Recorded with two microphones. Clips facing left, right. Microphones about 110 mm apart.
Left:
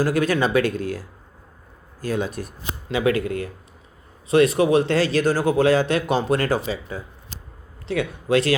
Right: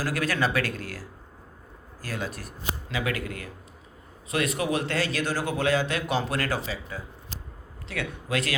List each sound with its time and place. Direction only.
0.0 s speech: 20° left (ahead or behind)